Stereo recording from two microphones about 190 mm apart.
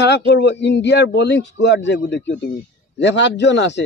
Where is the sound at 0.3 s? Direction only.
65° left (ahead or behind).